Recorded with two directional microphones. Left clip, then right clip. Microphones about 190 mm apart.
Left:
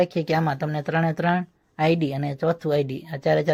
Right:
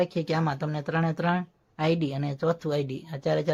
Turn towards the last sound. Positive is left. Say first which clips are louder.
# left 5 dB
turn(degrees=15)  # may be behind; listen again after turning